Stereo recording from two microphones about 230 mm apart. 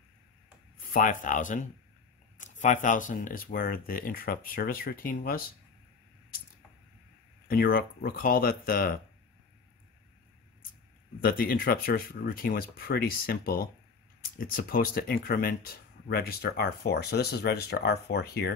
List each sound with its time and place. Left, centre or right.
0.7 s speech: left
7.4 s speech: left
11.2 s speech: left